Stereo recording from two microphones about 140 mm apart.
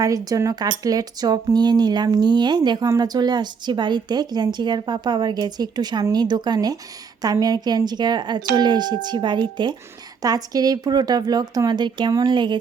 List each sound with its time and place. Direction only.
0.0 s speech: 25° right (ahead or behind)